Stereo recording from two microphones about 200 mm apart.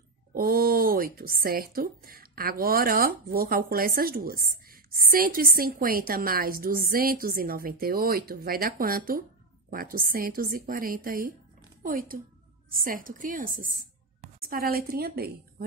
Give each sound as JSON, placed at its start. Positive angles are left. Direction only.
{"t": 0.3, "sound": "a woman's voice", "side_deg": -45}